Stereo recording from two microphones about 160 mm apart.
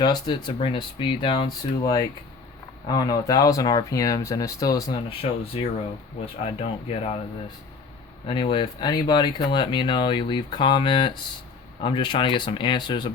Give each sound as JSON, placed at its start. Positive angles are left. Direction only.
{"t": 0.0, "sound": "speech", "side_deg": 25}
{"t": 5.2, "sound": "speech", "side_deg": 40}
{"t": 6.4, "sound": "speech", "side_deg": 40}
{"t": 8.3, "sound": "speech", "side_deg": 30}